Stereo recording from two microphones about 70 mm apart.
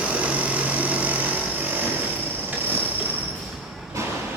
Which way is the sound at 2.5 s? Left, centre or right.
Right.